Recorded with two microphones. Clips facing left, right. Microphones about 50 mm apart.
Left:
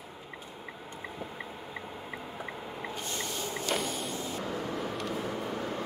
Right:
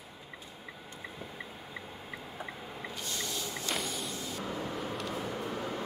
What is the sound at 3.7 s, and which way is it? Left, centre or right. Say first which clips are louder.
Vehicle: left 4 dB; centre.